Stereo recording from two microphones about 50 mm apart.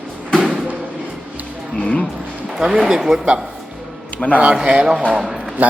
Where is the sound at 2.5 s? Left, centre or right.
Centre.